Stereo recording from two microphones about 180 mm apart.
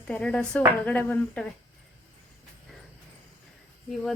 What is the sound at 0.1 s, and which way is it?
Speech, 5° left (ahead or behind).